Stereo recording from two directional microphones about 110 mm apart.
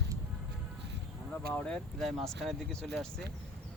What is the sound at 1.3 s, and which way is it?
Speech, 10° left (ahead or behind).